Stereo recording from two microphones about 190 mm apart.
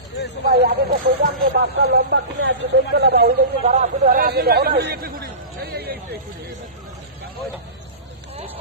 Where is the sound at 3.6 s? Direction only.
40° right (ahead or behind); by 6.5 s 55° right (ahead or behind).